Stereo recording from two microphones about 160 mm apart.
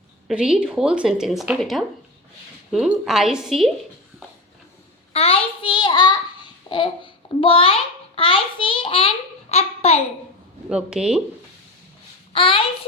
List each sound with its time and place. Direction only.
0.3 s speech: 5° right (ahead or behind)
5.1 s child singing: 35° left (ahead or behind)
6.7 s a sound: 30° left (ahead or behind)
10.7 s speech: 5° right (ahead or behind)
12.3 s a child's voice: 35° left (ahead or behind)